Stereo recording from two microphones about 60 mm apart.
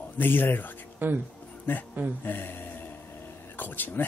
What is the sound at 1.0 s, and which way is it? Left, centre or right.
Speech, right.